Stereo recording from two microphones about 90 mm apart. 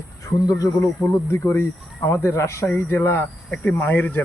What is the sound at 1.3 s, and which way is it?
Speech, 25° left (ahead or behind).